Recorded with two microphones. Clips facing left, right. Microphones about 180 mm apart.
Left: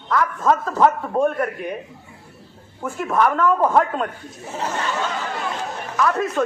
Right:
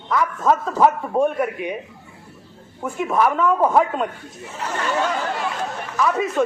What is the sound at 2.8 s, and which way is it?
A man's voice, centre (ahead or behind).